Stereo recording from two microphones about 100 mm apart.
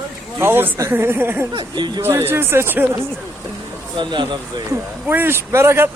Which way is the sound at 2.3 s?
25° right (ahead or behind).